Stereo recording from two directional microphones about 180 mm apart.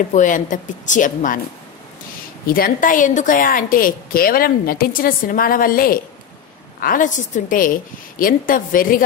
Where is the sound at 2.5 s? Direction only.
55° left (ahead or behind).